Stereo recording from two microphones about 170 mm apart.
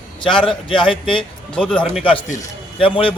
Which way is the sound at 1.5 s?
5° left (ahead or behind).